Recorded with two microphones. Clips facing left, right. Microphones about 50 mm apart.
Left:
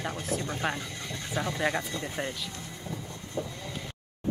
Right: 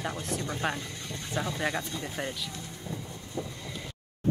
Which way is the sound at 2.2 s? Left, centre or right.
Centre.